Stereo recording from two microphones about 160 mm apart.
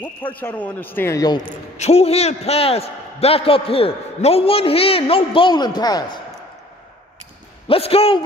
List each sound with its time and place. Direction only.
0.4 s a man's voice: 10° left (ahead or behind)
1.8 s a man's voice: 40° left (ahead or behind); by 6.2 s 25° left (ahead or behind)
7.6 s a man's voice: 35° left (ahead or behind)